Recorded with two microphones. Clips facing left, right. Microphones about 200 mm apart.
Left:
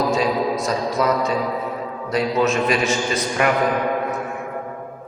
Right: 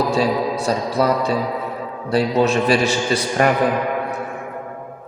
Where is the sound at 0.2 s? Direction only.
30° right (ahead or behind).